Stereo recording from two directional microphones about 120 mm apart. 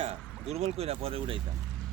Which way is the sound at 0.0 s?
60° right (ahead or behind).